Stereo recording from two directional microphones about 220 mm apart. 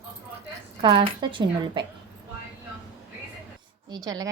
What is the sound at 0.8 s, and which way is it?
Speech, 20° right (ahead or behind).